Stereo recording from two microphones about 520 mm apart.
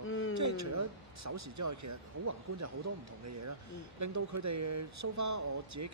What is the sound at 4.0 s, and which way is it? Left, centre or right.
Speech, right.